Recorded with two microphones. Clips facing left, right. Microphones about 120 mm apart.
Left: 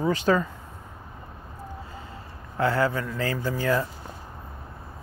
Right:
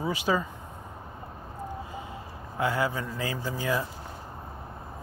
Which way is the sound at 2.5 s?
15° right (ahead or behind).